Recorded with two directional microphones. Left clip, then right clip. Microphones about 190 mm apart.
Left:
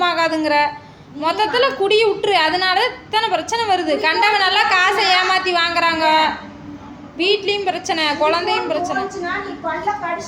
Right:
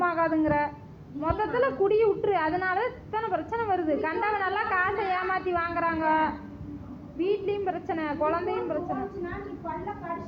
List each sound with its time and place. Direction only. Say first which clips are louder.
0.0 s a woman's voice: left 8 dB; 30° left (ahead or behind)